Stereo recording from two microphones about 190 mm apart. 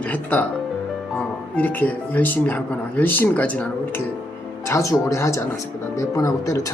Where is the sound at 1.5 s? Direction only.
10° left (ahead or behind).